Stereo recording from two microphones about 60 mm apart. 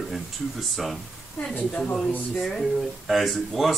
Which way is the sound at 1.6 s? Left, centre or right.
Left.